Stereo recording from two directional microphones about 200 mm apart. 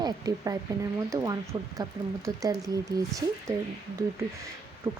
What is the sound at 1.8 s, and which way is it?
Speech, 15° right (ahead or behind).